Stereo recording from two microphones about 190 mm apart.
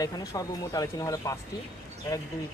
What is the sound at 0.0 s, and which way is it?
Speech, 20° left (ahead or behind).